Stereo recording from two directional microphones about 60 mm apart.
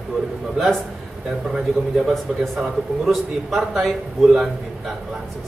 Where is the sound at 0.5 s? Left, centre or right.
Centre.